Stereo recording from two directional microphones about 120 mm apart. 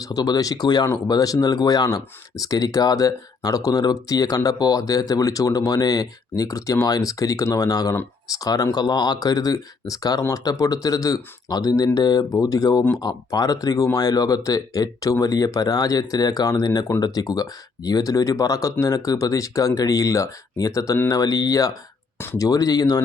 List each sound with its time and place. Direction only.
0.0 s speech: 30° left (ahead or behind)